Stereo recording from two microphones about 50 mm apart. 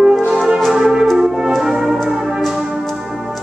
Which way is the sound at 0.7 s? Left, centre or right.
Centre.